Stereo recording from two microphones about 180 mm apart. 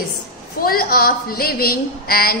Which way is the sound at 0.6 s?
55° left (ahead or behind).